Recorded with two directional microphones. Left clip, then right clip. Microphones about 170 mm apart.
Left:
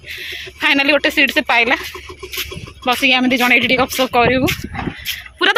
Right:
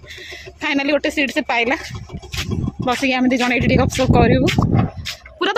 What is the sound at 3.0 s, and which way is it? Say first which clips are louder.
Speech: left 6 dB; 15° right (ahead or behind).